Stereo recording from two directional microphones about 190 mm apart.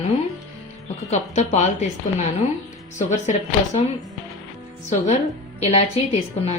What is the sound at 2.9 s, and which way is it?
Speech, 40° left (ahead or behind).